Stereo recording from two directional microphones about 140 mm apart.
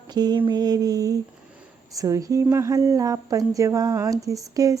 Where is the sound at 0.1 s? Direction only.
30° right (ahead or behind).